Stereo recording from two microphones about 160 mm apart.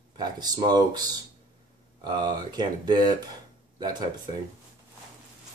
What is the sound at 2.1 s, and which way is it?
Speech, 25° right (ahead or behind).